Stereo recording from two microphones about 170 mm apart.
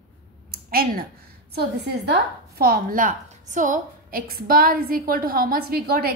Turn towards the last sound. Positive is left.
turn(degrees=-65)  # may be behind; listen again after turning